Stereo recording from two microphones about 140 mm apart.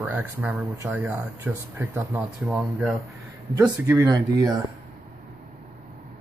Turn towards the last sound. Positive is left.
turn(degrees=-25)  # may be behind; listen again after turning